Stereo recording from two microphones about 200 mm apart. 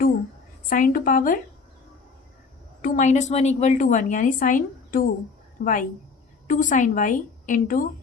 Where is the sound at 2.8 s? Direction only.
40° left (ahead or behind).